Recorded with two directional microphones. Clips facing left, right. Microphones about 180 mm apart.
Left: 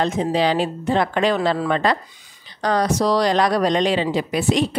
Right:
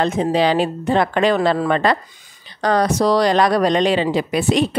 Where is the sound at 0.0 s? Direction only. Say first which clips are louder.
Right 2 dB; 60° right (ahead or behind).